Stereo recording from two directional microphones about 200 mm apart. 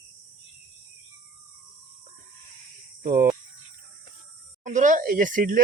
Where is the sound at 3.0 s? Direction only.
45° right (ahead or behind).